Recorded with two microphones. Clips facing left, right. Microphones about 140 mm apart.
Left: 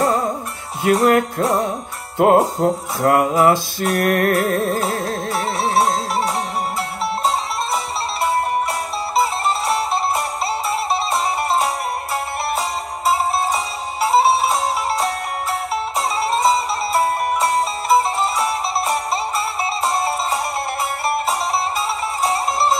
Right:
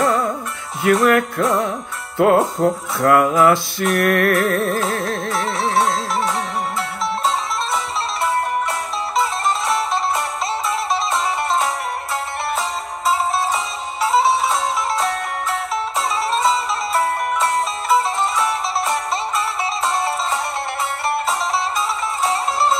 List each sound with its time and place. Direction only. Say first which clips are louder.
0.0 s music: even; 35° left (ahead or behind)
13.0 s music: left 1 dB; 35° left (ahead or behind)
21.3 s music: even; 35° left (ahead or behind)